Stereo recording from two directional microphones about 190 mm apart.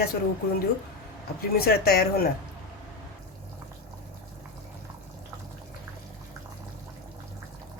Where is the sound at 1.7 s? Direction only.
55° left (ahead or behind).